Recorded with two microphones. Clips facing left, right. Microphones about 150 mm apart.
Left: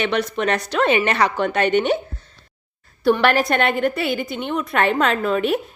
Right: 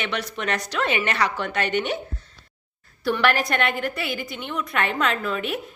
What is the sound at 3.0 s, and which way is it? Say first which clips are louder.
A woman's voice: left 5 dB; 25° left (ahead or behind).